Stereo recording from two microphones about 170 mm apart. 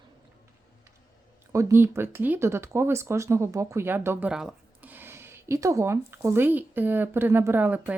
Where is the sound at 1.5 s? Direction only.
15° right (ahead or behind).